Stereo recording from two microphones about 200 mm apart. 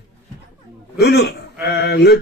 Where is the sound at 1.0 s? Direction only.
55° left (ahead or behind).